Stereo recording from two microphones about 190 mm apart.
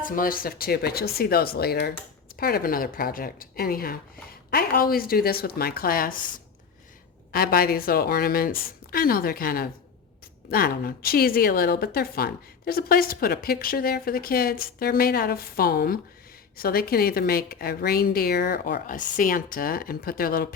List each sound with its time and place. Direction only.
0.0 s a woman's voice: 45° left (ahead or behind)
7.3 s a woman's voice: 50° left (ahead or behind)